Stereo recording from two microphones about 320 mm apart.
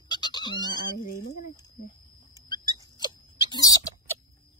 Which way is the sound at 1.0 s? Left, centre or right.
Left.